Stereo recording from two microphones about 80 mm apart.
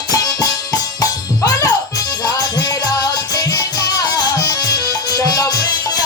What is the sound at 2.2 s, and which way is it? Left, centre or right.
Music, left.